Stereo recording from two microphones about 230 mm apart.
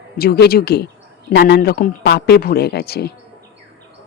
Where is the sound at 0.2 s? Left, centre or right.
Left.